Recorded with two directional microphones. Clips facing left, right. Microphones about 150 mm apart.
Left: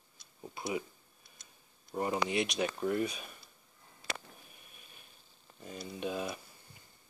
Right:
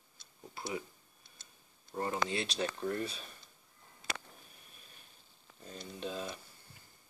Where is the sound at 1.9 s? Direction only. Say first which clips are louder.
Left 2 dB; 15° left (ahead or behind).